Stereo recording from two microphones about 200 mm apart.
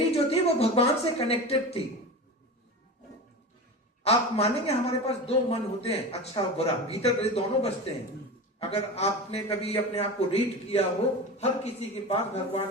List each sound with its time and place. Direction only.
0.1 s a woman's voice: 30° left (ahead or behind)
4.0 s a man's voice: 30° left (ahead or behind)